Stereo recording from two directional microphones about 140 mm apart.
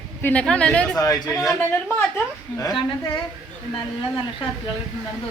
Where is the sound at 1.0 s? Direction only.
25° left (ahead or behind).